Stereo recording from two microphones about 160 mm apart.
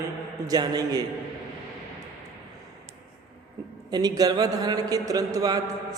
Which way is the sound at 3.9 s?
25° right (ahead or behind).